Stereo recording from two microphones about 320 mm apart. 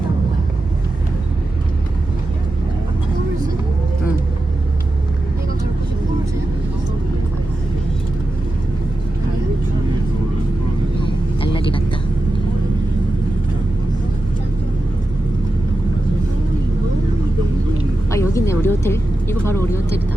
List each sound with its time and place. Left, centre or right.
11.0 s vehicle: centre
18.1 s vehicle: centre